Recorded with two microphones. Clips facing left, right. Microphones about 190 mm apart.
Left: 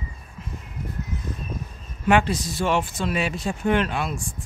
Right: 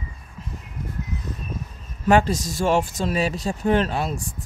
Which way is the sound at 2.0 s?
40° right (ahead or behind).